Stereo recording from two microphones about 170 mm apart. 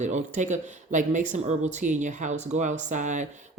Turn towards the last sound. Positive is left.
turn(degrees=-45)  # may be behind; listen again after turning